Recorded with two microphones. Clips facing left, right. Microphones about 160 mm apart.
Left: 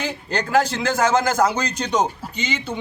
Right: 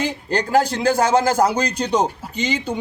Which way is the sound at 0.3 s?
35° right (ahead or behind).